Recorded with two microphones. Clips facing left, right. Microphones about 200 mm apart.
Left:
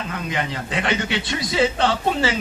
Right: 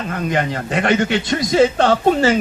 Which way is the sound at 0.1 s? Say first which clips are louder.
Right 9 dB; 50° right (ahead or behind).